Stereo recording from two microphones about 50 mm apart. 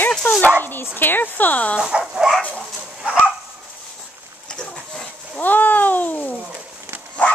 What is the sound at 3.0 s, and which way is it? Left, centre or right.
Dog, right.